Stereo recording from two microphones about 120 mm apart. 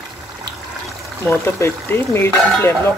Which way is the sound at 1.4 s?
20° left (ahead or behind).